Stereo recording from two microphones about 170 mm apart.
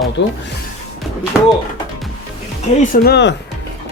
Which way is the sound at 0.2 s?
90° left.